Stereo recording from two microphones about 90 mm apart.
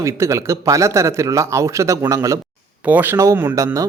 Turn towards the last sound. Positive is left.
turn(degrees=-20)  # may be behind; listen again after turning